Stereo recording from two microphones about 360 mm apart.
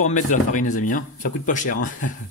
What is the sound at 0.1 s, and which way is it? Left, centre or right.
Speech, left.